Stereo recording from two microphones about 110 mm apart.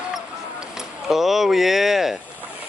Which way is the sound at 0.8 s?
5° right (ahead or behind).